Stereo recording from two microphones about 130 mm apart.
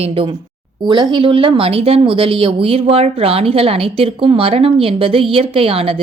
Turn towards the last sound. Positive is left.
turn(degrees=-45)  # may be behind; listen again after turning